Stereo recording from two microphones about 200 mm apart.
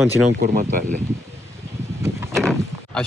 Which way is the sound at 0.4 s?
45° right (ahead or behind).